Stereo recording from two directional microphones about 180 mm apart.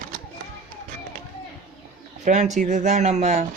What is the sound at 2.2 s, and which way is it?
Speech, 40° right (ahead or behind).